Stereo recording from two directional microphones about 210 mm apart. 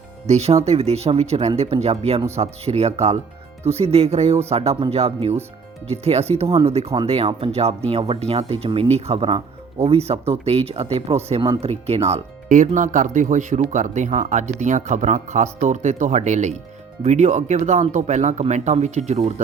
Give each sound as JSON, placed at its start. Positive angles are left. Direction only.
{"t": 0.3, "sound": "speech", "side_deg": -30}